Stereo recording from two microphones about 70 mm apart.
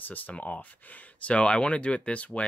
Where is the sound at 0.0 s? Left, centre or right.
Left.